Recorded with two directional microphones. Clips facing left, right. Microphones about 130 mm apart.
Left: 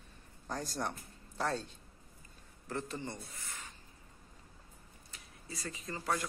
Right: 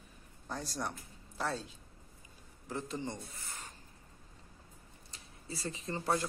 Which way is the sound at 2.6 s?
15° right (ahead or behind).